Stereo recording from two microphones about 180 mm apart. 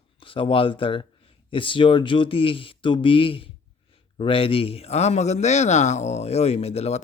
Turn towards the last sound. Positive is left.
turn(degrees=35)  # may be behind; listen again after turning